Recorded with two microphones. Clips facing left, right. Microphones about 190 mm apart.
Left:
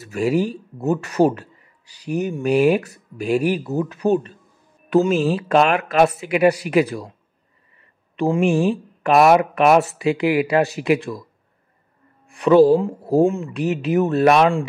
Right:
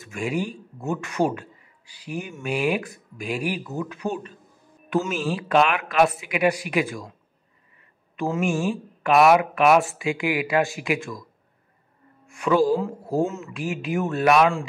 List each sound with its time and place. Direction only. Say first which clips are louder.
0.0 s a man's voice: left 7 dB; 40° left (ahead or behind)
8.2 s a man's voice: left 6 dB; 35° left (ahead or behind)
12.3 s a man's voice: left 8 dB; 35° left (ahead or behind)